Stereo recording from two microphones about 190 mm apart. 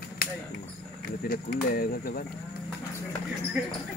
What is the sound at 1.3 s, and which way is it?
Speech, 50° left (ahead or behind).